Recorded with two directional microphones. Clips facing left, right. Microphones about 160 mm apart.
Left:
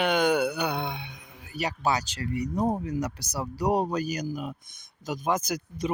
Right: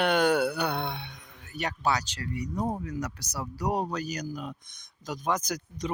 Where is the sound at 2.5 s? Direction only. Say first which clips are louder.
Left 4 dB; 30° left (ahead or behind).